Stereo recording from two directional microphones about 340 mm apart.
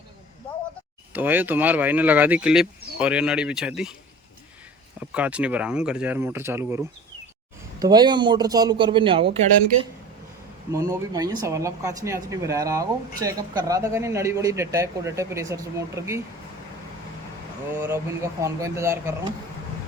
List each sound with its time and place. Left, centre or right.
1.1 s speech: centre
4.9 s speech: centre
10.7 s speech: centre
17.7 s speech: centre